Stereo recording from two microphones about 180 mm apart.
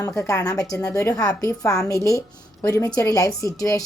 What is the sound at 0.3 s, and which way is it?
A woman's voice, 20° left (ahead or behind).